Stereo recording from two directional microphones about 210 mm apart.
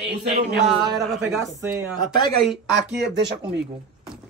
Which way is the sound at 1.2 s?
10° right (ahead or behind).